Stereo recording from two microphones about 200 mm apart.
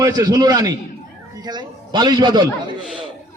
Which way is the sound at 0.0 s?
20° right (ahead or behind).